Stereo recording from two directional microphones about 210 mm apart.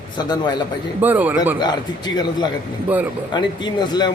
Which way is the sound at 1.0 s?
10° right (ahead or behind).